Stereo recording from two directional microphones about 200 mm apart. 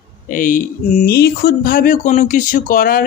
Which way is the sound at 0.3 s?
40° left (ahead or behind).